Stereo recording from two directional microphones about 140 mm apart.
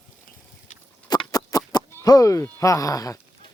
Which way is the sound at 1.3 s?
25° left (ahead or behind).